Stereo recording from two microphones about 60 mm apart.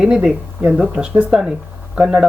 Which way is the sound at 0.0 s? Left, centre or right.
Centre.